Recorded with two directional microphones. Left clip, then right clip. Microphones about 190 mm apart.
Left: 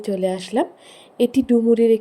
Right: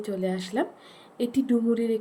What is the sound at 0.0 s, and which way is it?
Speech, 30° left (ahead or behind).